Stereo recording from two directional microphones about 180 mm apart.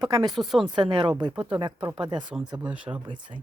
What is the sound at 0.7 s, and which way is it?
Speech, 25° right (ahead or behind).